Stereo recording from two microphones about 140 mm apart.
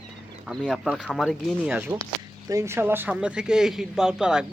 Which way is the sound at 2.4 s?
20° right (ahead or behind).